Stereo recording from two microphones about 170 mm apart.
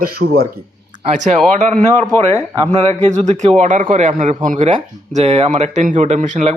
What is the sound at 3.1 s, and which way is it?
A man's voice, 45° right (ahead or behind).